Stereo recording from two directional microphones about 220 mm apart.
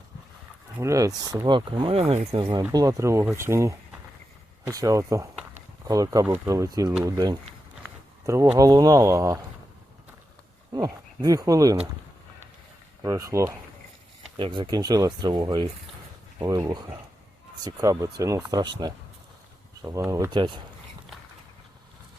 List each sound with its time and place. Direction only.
0.8 s speech: 15° right (ahead or behind)
10.7 s speech: 15° right (ahead or behind)
13.0 s speech: 15° right (ahead or behind)
19.8 s speech: 15° right (ahead or behind)